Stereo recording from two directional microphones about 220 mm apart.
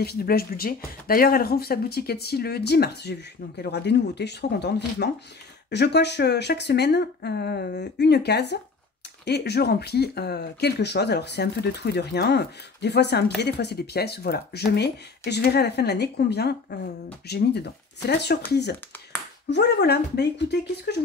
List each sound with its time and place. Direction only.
0.0 s speech: 45° left (ahead or behind)